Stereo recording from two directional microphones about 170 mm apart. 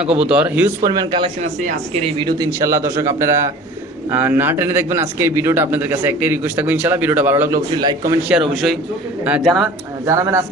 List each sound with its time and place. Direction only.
0.3 s a man's voice: 5° right (ahead or behind)
0.9 s speech: 25° right (ahead or behind)
1.4 s a man's voice: 40° right (ahead or behind); by 7.6 s 10° right (ahead or behind)
7.7 s speech: 25° right (ahead or behind)
8.3 s a man's voice: centre (ahead or behind)
10.1 s a man's voice: 15° right (ahead or behind)